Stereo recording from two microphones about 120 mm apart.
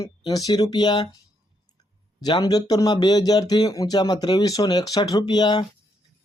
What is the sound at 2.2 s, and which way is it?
Speech, 35° left (ahead or behind).